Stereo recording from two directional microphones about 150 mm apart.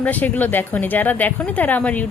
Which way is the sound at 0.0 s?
10° left (ahead or behind).